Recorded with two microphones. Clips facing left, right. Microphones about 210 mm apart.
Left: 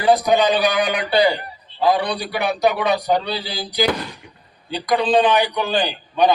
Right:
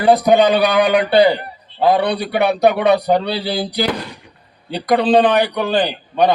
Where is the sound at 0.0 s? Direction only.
60° right (ahead or behind).